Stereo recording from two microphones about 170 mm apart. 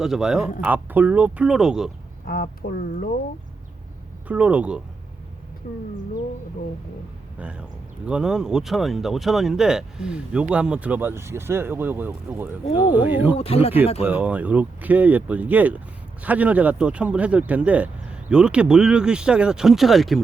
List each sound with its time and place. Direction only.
0.0 s speech: 5° right (ahead or behind)
2.2 s speech: 60° left (ahead or behind)
4.3 s speech: 10° right (ahead or behind)
5.6 s speech: 55° left (ahead or behind)
7.3 s speech: 5° right (ahead or behind)
13.3 s speech: 35° left (ahead or behind)
14.1 s speech: 10° right (ahead or behind)